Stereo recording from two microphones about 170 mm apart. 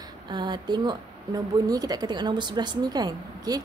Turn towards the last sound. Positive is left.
turn(degrees=-25)  # may be behind; listen again after turning